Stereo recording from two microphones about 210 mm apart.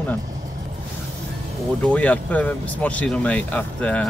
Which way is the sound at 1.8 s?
5° left (ahead or behind).